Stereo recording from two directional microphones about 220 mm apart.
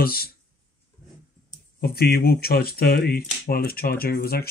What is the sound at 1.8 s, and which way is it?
Speech, 45° left (ahead or behind).